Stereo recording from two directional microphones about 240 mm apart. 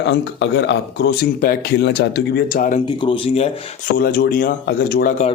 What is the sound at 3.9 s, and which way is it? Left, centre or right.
Speech, left.